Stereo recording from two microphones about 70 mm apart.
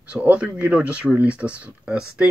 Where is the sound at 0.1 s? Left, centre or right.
Centre.